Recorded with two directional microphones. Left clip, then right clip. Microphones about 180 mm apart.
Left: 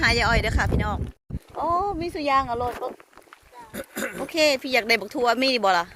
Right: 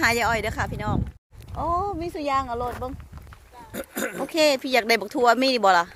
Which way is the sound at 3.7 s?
65° right (ahead or behind).